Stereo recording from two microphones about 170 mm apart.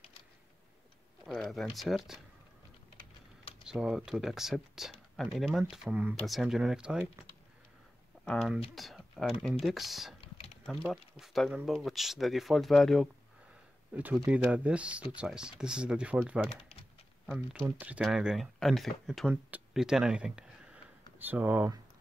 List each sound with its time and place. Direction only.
1.2 s speech: centre (ahead or behind)
3.6 s speech: 5° right (ahead or behind)
8.3 s speech: centre (ahead or behind)
10.3 s mechanisms: 35° left (ahead or behind)
10.7 s speech: centre (ahead or behind)